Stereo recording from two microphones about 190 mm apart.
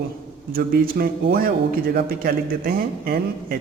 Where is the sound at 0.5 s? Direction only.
50° right (ahead or behind).